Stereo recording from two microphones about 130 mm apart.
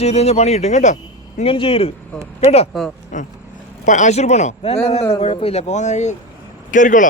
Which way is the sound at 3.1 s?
70° left (ahead or behind).